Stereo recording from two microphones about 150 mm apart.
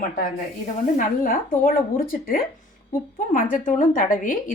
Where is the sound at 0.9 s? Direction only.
65° left (ahead or behind).